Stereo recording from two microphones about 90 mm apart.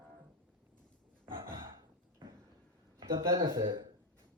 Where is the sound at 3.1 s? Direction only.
40° right (ahead or behind).